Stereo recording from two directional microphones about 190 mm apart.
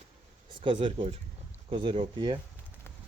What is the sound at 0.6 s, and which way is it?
Speech, 30° right (ahead or behind).